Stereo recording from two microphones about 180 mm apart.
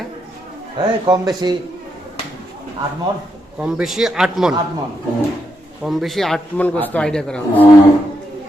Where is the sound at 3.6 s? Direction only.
5° right (ahead or behind).